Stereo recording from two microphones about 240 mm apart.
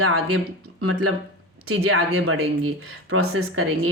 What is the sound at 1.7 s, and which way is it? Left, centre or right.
Speech, right.